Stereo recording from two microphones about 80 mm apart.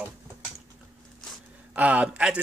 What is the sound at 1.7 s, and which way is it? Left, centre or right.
Speech, centre.